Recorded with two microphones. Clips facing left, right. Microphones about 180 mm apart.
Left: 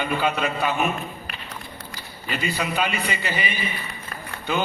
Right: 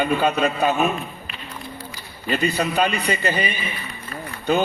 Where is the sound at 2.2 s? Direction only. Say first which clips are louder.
Right 5 dB; 45° right (ahead or behind).